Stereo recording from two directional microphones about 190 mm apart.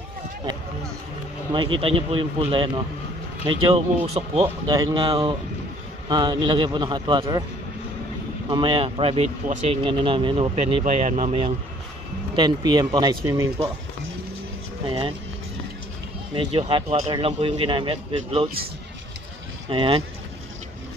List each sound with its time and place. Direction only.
1.8 s speech: 30° right (ahead or behind)
4.6 s speech: 20° right (ahead or behind)
8.5 s speech: 25° right (ahead or behind)
14.9 s speech: 25° right (ahead or behind)
16.3 s speech: 30° right (ahead or behind)
19.7 s speech: 25° right (ahead or behind)